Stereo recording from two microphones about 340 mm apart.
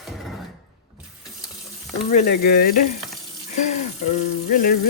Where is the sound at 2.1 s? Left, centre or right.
Left.